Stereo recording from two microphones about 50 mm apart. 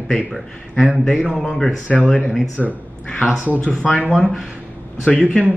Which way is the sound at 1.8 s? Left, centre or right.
Left.